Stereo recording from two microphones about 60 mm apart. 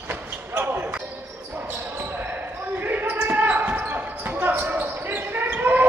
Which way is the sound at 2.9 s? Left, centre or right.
Right.